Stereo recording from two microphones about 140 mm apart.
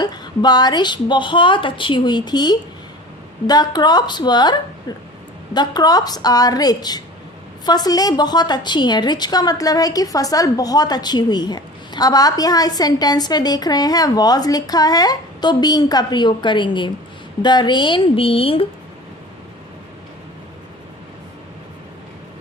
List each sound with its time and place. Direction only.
0.0 s a woman's voice: 30° left (ahead or behind)